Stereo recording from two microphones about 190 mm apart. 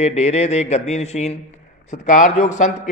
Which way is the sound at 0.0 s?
35° left (ahead or behind).